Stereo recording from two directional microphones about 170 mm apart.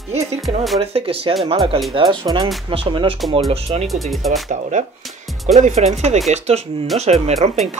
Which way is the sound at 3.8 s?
Centre (ahead or behind).